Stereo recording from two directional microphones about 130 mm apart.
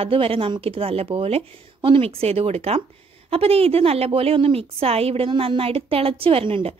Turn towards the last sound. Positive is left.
turn(degrees=-45)  # may be behind; listen again after turning